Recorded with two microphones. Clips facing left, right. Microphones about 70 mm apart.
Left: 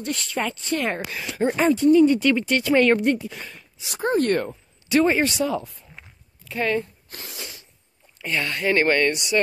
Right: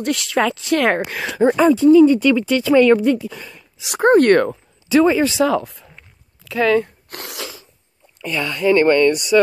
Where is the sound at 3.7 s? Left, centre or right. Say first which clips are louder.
Right 11 dB; right.